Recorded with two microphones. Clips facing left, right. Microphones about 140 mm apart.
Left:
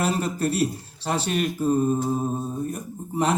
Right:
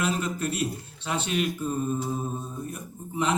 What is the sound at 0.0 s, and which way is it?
Mantra, 35° left (ahead or behind).